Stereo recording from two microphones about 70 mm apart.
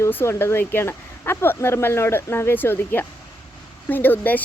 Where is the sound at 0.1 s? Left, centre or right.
Left.